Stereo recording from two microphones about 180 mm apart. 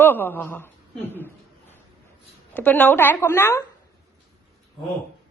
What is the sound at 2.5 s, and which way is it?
A woman's voice, 10° left (ahead or behind).